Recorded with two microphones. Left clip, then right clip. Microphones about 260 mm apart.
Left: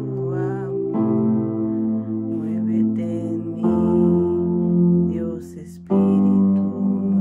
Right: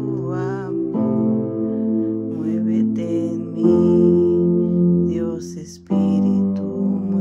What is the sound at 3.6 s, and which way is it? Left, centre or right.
Music, centre.